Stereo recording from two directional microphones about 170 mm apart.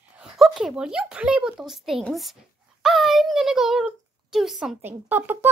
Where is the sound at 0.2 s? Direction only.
5° right (ahead or behind).